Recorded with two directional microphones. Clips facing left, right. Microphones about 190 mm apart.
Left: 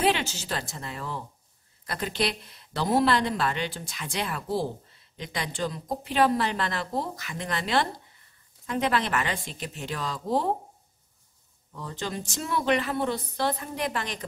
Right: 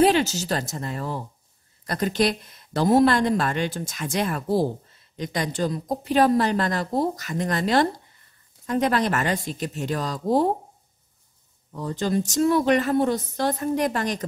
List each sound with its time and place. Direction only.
0.0 s speech: 40° right (ahead or behind)
11.7 s speech: 40° right (ahead or behind)